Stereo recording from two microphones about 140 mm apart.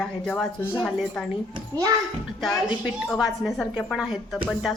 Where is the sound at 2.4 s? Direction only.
Centre (ahead or behind).